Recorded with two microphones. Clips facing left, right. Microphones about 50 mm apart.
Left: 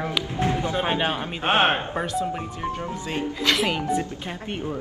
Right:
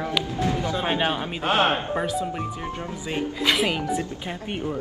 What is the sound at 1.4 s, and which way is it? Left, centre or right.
Speech, left.